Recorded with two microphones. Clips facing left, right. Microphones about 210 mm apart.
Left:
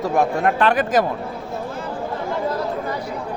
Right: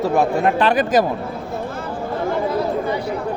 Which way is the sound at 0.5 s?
35° right (ahead or behind).